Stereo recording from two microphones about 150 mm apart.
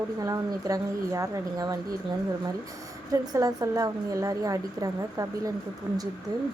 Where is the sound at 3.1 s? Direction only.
20° right (ahead or behind).